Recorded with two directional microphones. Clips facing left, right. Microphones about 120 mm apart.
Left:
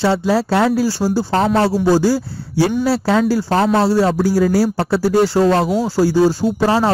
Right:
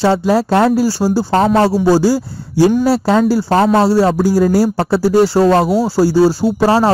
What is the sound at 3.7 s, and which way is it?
Speech, 40° right (ahead or behind).